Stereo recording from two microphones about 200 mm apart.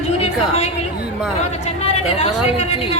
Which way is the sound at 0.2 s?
30° left (ahead or behind).